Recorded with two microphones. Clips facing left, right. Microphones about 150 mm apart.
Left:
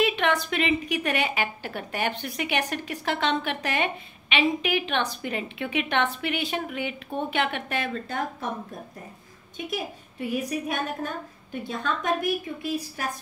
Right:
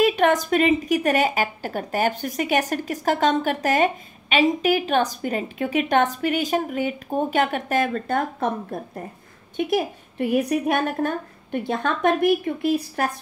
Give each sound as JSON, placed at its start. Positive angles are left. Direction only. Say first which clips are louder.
{"t": 0.0, "sound": "a woman's voice", "louder": "right 6 dB", "side_deg": -45}
{"t": 9.7, "sound": "a woman's voice", "louder": "right 7 dB", "side_deg": -60}